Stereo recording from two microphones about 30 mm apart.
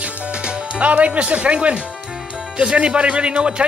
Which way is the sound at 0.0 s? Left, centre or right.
Right.